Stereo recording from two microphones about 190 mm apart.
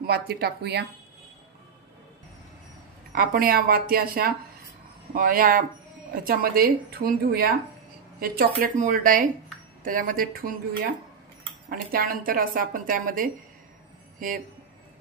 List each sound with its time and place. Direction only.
0.0 s a woman's voice: 55° right (ahead or behind)
3.2 s a woman's voice: 50° right (ahead or behind)
8.5 s a woman's voice: 45° right (ahead or behind)